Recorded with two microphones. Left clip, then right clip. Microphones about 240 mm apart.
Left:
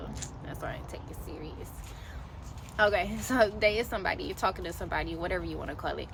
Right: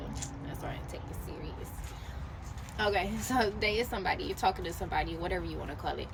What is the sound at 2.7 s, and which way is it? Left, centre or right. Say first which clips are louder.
A woman's voice: left 4 dB; centre.